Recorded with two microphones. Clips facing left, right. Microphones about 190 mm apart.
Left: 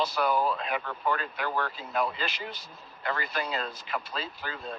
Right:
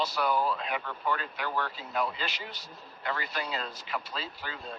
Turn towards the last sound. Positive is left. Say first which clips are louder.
# left 2 dB
turn(degrees=50)  # may be behind; listen again after turning